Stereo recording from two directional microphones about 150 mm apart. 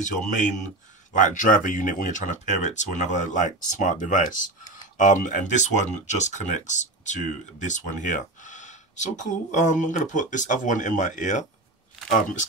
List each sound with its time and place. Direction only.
0.0 s speech: 55° left (ahead or behind)